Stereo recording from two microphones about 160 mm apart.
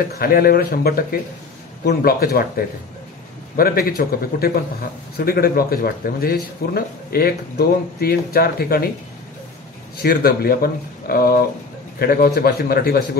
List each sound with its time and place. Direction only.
0.1 s speech: 70° left (ahead or behind)
10.0 s speech: 70° left (ahead or behind)